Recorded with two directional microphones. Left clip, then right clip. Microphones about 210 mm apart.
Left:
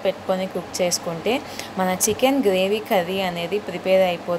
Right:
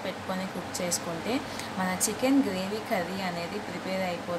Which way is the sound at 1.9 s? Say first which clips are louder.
Left 8 dB; 35° left (ahead or behind).